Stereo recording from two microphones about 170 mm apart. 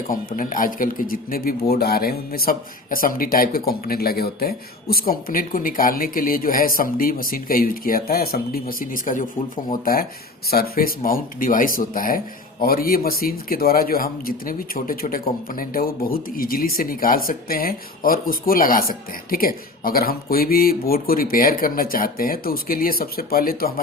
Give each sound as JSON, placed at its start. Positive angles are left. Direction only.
{"t": 0.1, "sound": "speech", "side_deg": 55}